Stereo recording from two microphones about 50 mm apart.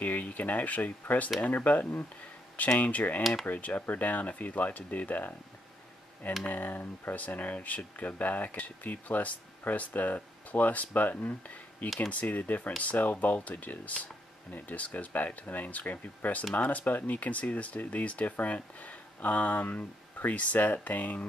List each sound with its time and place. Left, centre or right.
0.0 s speech: left
6.4 s speech: left